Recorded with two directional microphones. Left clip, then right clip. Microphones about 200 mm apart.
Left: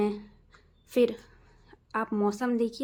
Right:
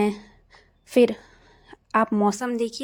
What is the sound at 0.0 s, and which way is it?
A woman's voice, 35° right (ahead or behind).